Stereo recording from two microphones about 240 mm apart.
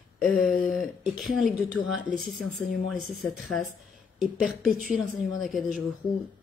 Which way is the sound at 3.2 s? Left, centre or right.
Centre.